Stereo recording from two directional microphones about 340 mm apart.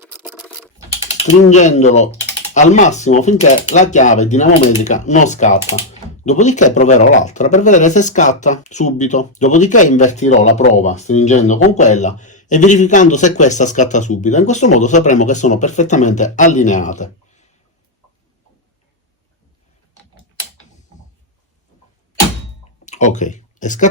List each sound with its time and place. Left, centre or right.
0.0 s computer keyboard: centre
1.2 s speech: left
22.9 s speech: left